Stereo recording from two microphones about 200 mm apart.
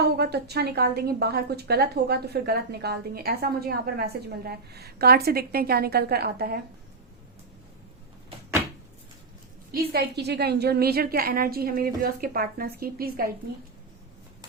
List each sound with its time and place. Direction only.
0.0 s a woman's voice: 55° right (ahead or behind)
9.7 s a woman's voice: 55° right (ahead or behind)